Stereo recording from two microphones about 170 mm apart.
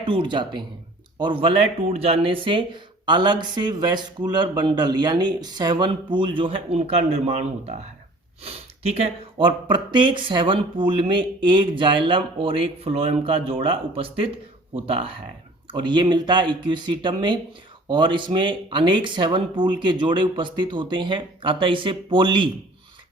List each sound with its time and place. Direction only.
0.0 s speech: 30° right (ahead or behind)
9.4 s speech: 30° right (ahead or behind)